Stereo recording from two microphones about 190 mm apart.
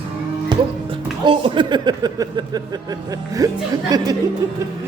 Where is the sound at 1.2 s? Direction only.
25° right (ahead or behind).